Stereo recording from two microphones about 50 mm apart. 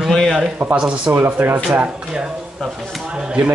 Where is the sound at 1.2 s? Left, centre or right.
Right.